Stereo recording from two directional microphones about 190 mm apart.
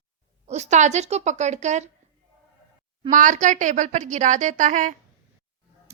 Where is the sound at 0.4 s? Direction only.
35° right (ahead or behind).